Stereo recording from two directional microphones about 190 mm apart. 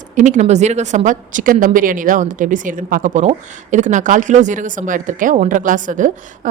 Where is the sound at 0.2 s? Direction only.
40° right (ahead or behind).